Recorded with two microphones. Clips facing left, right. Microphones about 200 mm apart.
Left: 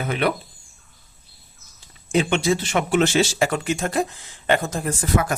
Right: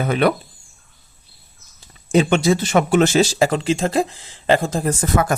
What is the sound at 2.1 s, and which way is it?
Speech, 40° right (ahead or behind).